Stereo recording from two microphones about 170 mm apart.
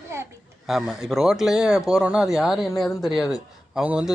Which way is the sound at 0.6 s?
Centre (ahead or behind).